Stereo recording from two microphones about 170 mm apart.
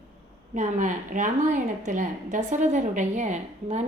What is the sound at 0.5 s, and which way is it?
A woman's voice, 45° right (ahead or behind).